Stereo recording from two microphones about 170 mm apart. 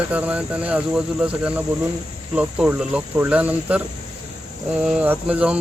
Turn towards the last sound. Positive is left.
turn(degrees=-5)  # may be behind; listen again after turning